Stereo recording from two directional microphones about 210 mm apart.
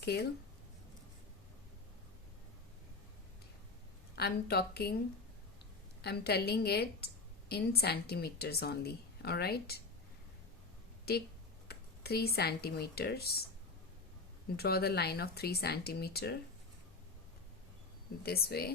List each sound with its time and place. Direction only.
0.0 s speech: 50° left (ahead or behind)
4.1 s a woman's voice: 50° left (ahead or behind)
6.0 s a woman's voice: 50° left (ahead or behind)
11.1 s a woman's voice: 50° left (ahead or behind)
14.5 s a woman's voice: 50° left (ahead or behind)
18.2 s a woman's voice: 45° left (ahead or behind)